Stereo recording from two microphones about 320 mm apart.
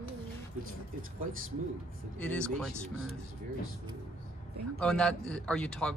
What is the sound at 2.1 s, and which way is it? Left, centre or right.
Speech, centre.